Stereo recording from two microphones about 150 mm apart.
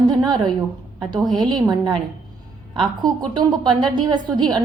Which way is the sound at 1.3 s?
Centre (ahead or behind).